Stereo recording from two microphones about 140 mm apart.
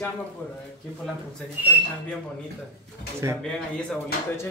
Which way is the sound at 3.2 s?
25° right (ahead or behind).